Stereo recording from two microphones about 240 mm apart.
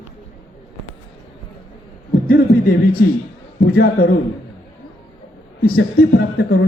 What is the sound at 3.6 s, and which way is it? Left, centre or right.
Speech, left.